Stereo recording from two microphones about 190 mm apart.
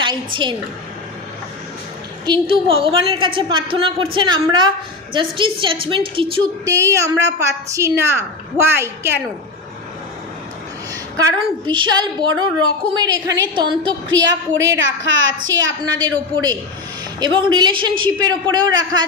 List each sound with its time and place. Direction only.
0.0 s a woman's voice: 25° right (ahead or behind)
2.2 s a woman's voice: 25° right (ahead or behind)
11.2 s a woman's voice: 25° right (ahead or behind)
15.8 s a woman's voice: 20° right (ahead or behind)